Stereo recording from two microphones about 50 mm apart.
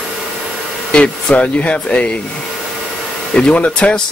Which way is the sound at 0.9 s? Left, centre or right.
Left.